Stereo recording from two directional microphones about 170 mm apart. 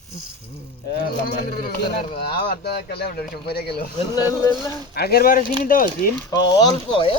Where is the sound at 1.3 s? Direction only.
60° left (ahead or behind).